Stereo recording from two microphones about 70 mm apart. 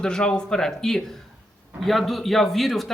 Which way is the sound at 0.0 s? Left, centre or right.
Centre.